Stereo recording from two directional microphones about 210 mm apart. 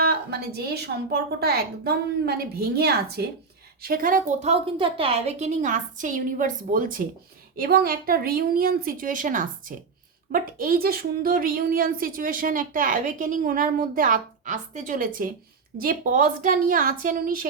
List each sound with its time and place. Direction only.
0.0 s a woman's voice: 50° right (ahead or behind)